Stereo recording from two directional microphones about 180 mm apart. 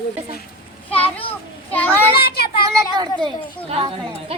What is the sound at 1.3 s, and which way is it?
Child singing, 10° left (ahead or behind).